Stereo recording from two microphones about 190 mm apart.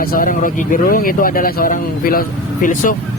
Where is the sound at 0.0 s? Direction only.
50° left (ahead or behind).